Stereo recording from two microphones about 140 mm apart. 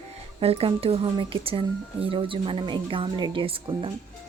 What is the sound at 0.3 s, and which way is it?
Speech, 45° right (ahead or behind).